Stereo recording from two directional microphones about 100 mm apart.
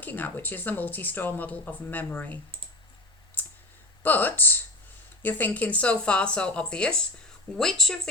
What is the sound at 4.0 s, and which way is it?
A woman's voice, 20° left (ahead or behind).